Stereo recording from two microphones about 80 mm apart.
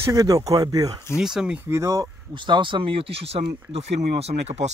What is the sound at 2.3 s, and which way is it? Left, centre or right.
Speech, right.